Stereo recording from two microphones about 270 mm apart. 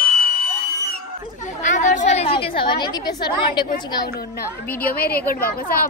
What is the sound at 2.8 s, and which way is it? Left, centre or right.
Speech, centre.